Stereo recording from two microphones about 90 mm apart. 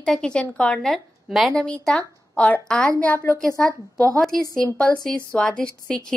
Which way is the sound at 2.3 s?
15° left (ahead or behind).